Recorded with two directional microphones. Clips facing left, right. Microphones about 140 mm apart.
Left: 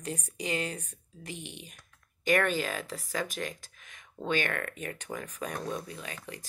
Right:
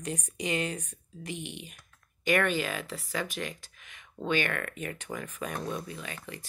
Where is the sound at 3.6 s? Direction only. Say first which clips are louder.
Even; 45° left (ahead or behind).